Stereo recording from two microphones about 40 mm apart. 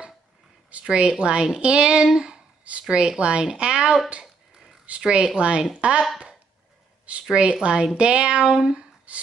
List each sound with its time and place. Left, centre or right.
0.7 s a woman's voice: right
7.2 s a woman's voice: right